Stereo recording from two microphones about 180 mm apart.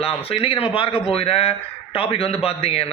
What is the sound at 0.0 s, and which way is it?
A man's voice, 30° left (ahead or behind).